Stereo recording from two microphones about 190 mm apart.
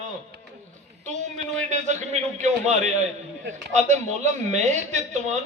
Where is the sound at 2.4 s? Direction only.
40° right (ahead or behind).